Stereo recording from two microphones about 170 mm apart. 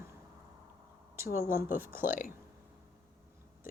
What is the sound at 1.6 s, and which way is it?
Speech, 10° right (ahead or behind).